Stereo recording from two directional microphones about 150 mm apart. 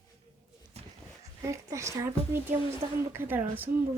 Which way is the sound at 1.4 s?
20° right (ahead or behind).